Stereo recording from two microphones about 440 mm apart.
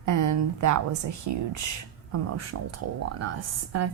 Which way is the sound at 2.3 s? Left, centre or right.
Right.